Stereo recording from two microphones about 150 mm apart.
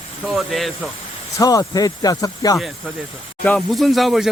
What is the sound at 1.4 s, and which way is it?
Speech, 25° left (ahead or behind).